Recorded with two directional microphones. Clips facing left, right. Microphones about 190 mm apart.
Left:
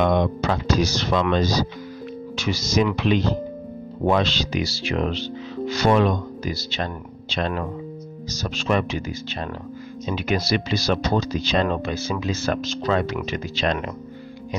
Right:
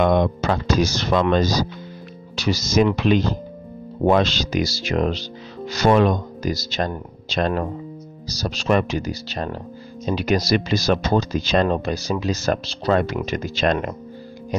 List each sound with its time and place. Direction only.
0.0 s speech: 50° right (ahead or behind)
12.9 s speech: 45° right (ahead or behind)